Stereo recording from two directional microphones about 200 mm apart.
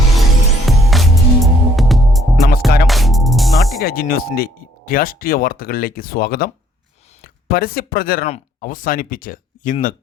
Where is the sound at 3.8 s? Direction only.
45° left (ahead or behind).